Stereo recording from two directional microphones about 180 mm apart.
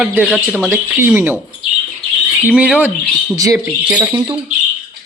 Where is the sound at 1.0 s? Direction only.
10° right (ahead or behind).